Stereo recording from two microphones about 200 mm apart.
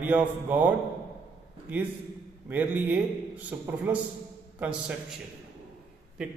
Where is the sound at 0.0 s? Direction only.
10° right (ahead or behind).